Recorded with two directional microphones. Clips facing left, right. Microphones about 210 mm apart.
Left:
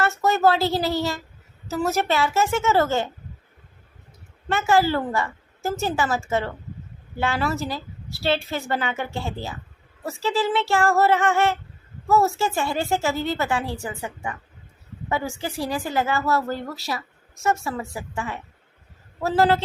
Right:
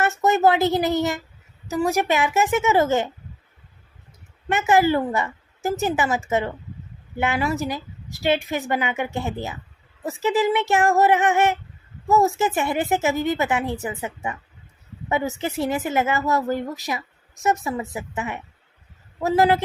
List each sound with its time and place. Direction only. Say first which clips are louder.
0.2 s a woman's voice: right 2 dB; 20° right (ahead or behind)
4.4 s a woman's voice: right 2 dB; 20° right (ahead or behind)